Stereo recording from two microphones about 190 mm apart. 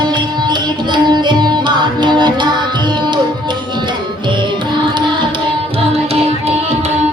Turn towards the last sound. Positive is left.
turn(degrees=-35)  # may be behind; listen again after turning